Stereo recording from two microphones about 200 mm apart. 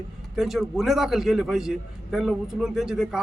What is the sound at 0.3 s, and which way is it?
Speech, centre (ahead or behind).